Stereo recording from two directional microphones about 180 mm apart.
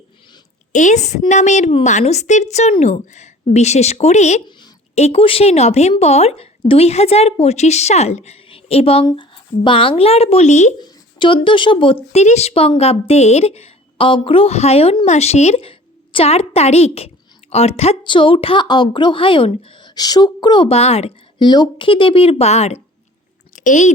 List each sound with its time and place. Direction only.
0.7 s a woman's voice: 45° left (ahead or behind)
10.8 s a woman's voice: 25° left (ahead or behind); by 23.9 s 45° left (ahead or behind)